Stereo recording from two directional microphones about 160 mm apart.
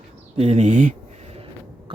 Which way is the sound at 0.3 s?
40° right (ahead or behind).